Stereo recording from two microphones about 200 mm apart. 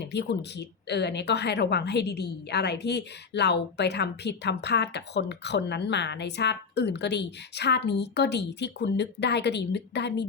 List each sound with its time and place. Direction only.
0.0 s speech: 60° left (ahead or behind)